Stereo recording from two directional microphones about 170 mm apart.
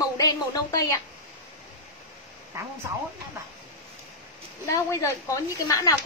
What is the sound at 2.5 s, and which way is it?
Speech, 15° right (ahead or behind).